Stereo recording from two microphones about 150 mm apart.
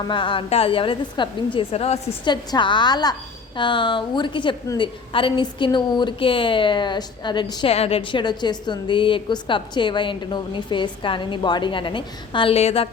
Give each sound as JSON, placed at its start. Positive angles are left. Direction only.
{"t": 0.1, "sound": "a woman's voice", "side_deg": 35}
{"t": 2.3, "sound": "a woman's voice", "side_deg": 30}
{"t": 7.7, "sound": "a woman's voice", "side_deg": 40}